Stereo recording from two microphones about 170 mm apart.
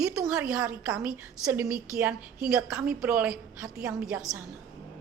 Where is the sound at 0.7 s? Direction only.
5° right (ahead or behind).